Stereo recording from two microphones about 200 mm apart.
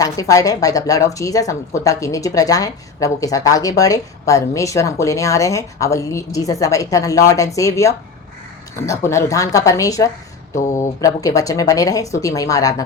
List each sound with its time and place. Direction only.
0.0 s speech: 15° left (ahead or behind)